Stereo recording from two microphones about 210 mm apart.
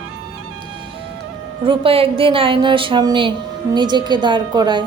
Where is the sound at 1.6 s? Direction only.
25° right (ahead or behind).